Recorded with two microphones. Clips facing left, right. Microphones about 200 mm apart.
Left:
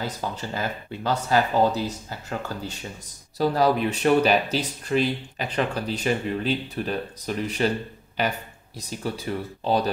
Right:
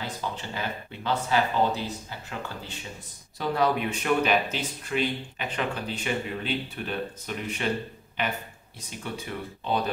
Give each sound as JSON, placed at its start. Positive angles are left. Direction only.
{"t": 0.0, "sound": "speech", "side_deg": 40}
{"t": 9.0, "sound": "speech", "side_deg": 35}